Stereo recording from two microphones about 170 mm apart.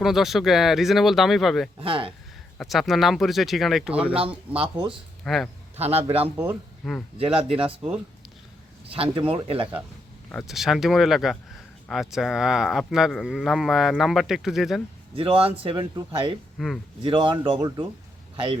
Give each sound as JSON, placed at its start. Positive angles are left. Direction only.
{"t": 0.0, "sound": "speech", "side_deg": 0}
{"t": 1.8, "sound": "speech", "side_deg": -30}
{"t": 2.6, "sound": "speech", "side_deg": 0}
{"t": 4.1, "sound": "speech", "side_deg": -35}
{"t": 5.2, "sound": "a man's voice", "side_deg": 0}
{"t": 5.7, "sound": "speech", "side_deg": -35}
{"t": 6.3, "sound": "speech", "side_deg": -10}
{"t": 6.8, "sound": "speech", "side_deg": 0}
{"t": 8.9, "sound": "speech", "side_deg": -30}
{"t": 10.3, "sound": "speech", "side_deg": 0}
{"t": 15.1, "sound": "speech", "side_deg": -35}
{"t": 16.6, "sound": "speech", "side_deg": 0}
{"t": 17.0, "sound": "speech", "side_deg": -30}